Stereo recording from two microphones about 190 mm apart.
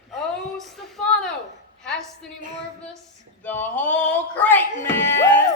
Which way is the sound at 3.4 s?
10° left (ahead or behind).